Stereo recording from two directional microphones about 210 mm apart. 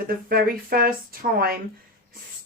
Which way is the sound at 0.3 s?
45° right (ahead or behind).